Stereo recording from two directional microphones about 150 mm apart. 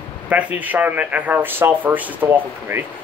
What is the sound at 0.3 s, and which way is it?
A man's voice, 10° right (ahead or behind).